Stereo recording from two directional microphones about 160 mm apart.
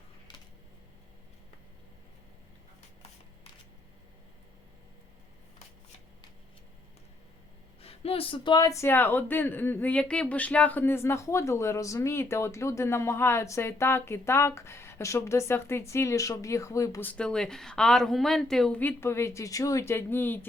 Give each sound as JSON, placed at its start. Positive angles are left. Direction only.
{"t": 7.8, "sound": "speech", "side_deg": 40}